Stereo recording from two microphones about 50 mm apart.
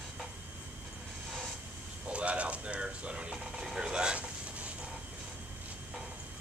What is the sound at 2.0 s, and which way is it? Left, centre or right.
Mechanisms, right.